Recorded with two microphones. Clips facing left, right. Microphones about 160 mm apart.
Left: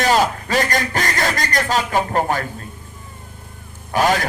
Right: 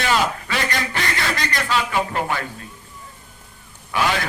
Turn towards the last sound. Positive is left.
turn(degrees=45)  # may be behind; listen again after turning